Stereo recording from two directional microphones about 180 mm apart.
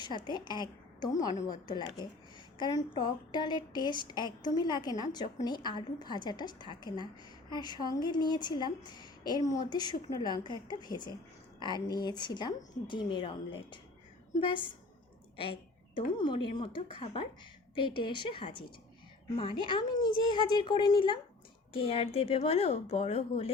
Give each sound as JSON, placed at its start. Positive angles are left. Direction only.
{"t": 0.0, "sound": "a woman's voice", "side_deg": 25}
{"t": 16.0, "sound": "a woman's voice", "side_deg": 25}